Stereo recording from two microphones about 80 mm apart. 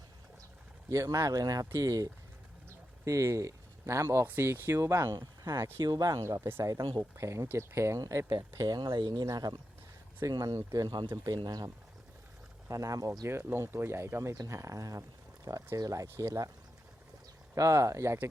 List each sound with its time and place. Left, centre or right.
0.9 s speech: right
5.1 s speech: right
5.5 s speech: right
5.8 s speech: right
6.7 s speech: right
7.2 s speech: right
8.5 s speech: right
11.3 s speech: right
12.6 s speech: right
13.2 s speech: right
17.5 s speech: right